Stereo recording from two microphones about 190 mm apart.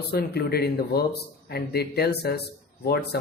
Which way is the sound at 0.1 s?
55° left (ahead or behind).